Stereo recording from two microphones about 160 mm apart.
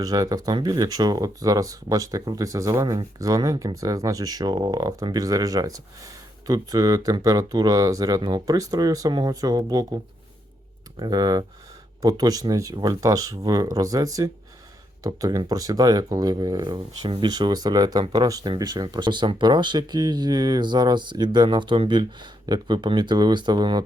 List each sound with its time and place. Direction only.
0.0 s speech: 25° right (ahead or behind)
11.0 s speech: 25° right (ahead or behind)